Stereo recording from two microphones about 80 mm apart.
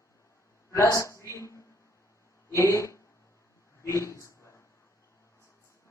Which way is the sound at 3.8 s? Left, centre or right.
Left.